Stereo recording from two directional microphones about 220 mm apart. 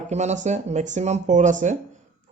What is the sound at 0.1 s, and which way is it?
A man's voice, 30° right (ahead or behind).